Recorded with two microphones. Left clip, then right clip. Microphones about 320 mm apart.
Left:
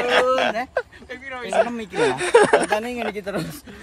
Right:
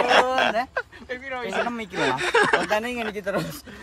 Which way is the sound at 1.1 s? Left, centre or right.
Right.